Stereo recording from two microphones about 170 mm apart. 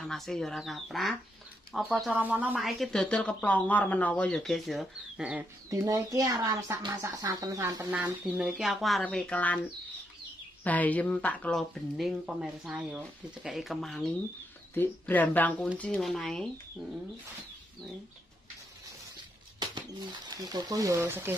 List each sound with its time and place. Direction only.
0.0 s speech: centre (ahead or behind)
5.7 s speech: 20° right (ahead or behind)
7.9 s speech: 10° right (ahead or behind); by 9.6 s 10° left (ahead or behind)
10.6 s speech: 10° left (ahead or behind)
19.6 s speech: 25° right (ahead or behind)